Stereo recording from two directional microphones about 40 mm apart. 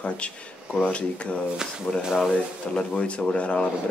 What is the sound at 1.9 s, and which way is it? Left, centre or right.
Speech, centre.